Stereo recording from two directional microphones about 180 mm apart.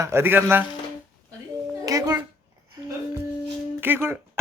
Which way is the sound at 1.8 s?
20° right (ahead or behind).